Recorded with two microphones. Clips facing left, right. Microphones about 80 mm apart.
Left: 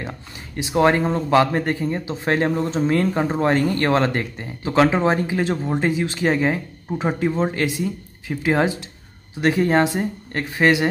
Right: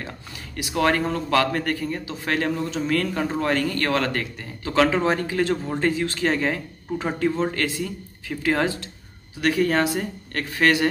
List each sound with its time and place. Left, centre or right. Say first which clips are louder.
0.6 s speech: left 4 dB; left